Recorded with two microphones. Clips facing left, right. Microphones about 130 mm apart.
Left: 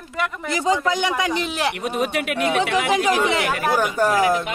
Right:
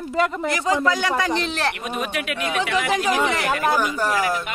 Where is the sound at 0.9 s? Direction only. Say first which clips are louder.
Even; 20° left (ahead or behind).